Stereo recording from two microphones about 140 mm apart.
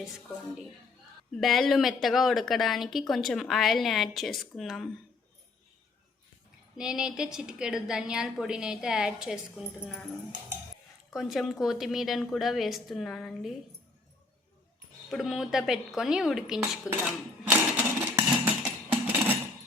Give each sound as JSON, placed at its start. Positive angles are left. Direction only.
{"t": 1.4, "sound": "speech", "side_deg": 0}
{"t": 6.7, "sound": "speech", "side_deg": -5}
{"t": 11.1, "sound": "speech", "side_deg": 0}
{"t": 15.1, "sound": "speech", "side_deg": 0}
{"t": 17.4, "sound": "a sound", "side_deg": -10}